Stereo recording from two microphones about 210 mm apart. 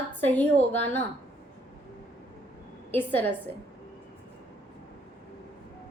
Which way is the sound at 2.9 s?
10° left (ahead or behind).